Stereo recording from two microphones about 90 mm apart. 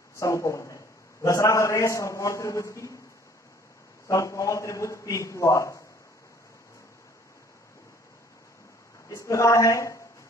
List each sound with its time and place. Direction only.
0.2 s a man's voice: 35° left (ahead or behind)
4.1 s a man's voice: 35° left (ahead or behind)
9.1 s a man's voice: 35° left (ahead or behind)